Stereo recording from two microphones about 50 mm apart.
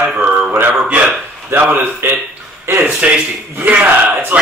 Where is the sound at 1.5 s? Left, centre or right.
Right.